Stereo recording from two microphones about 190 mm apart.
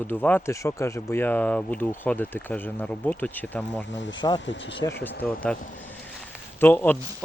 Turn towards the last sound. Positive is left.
turn(degrees=10)  # may be behind; listen again after turning